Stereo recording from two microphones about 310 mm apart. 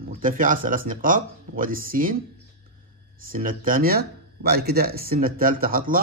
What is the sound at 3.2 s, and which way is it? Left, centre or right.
Speech, right.